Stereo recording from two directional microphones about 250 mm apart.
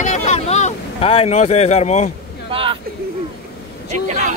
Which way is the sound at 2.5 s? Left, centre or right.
Right.